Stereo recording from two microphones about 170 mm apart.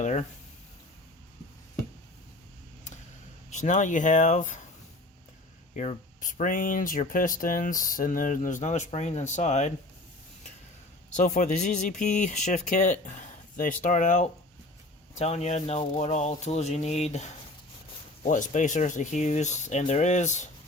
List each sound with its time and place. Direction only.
0.0 s speech: 45° left (ahead or behind)
3.5 s speech: 45° left (ahead or behind)
5.7 s speech: 45° left (ahead or behind)
11.1 s speech: 45° left (ahead or behind)